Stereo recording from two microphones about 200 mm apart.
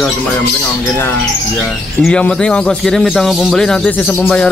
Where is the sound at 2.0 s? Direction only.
5° left (ahead or behind).